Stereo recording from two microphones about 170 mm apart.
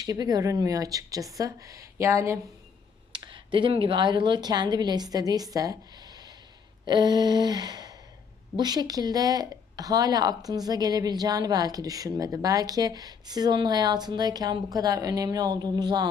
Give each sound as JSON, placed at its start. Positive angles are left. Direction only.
{"t": 0.0, "sound": "speech", "side_deg": -20}
{"t": 3.1, "sound": "speech", "side_deg": -30}